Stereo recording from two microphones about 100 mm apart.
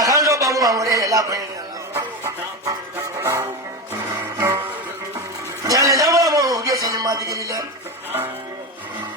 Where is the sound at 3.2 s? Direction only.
30° right (ahead or behind).